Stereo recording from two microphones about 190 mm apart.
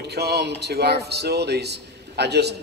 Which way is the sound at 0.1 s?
60° right (ahead or behind).